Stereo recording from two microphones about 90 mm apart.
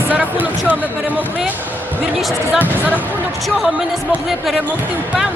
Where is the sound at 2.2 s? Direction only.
Centre (ahead or behind).